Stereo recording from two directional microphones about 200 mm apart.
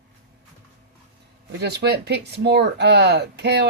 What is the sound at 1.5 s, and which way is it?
Speech, 55° right (ahead or behind).